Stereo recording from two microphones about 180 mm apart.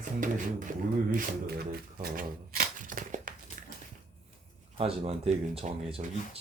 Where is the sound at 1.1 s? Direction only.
55° right (ahead or behind).